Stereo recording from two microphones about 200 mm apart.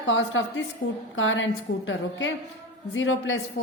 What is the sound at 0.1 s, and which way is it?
A woman's voice, 70° left (ahead or behind).